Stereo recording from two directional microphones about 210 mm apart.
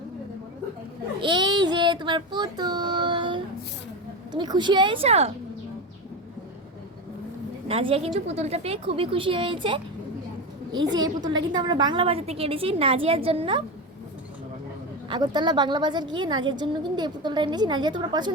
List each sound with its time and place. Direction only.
1.2 s a child's voice: 20° right (ahead or behind)
7.7 s a woman's voice: 25° right (ahead or behind)
15.1 s a woman's voice: 20° right (ahead or behind)